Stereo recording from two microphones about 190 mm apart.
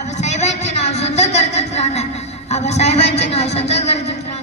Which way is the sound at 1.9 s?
35° left (ahead or behind).